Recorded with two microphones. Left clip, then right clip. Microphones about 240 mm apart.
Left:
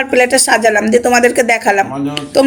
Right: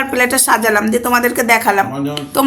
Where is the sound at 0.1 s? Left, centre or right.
Centre.